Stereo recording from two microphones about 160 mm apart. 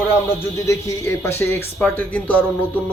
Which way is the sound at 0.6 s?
15° left (ahead or behind).